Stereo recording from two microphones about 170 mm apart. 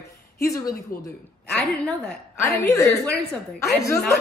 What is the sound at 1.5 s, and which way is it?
A woman's voice, 10° left (ahead or behind).